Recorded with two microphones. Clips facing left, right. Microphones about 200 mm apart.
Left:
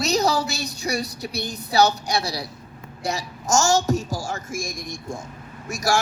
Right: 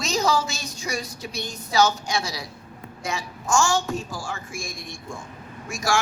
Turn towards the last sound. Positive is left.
turn(degrees=40)  # may be behind; listen again after turning